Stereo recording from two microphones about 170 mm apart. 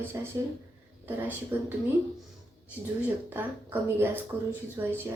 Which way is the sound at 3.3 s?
10° right (ahead or behind).